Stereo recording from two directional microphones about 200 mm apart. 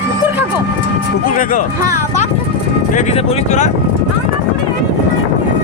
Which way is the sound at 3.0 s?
30° left (ahead or behind).